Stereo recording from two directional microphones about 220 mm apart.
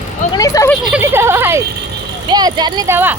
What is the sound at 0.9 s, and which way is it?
Speech, 10° right (ahead or behind).